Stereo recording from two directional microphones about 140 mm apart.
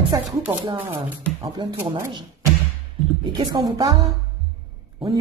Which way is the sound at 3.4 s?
30° right (ahead or behind).